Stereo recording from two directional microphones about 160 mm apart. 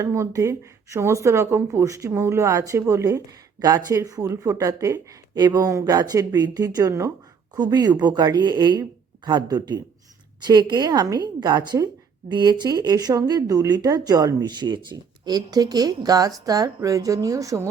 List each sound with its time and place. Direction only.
0.0 s speech: 20° right (ahead or behind)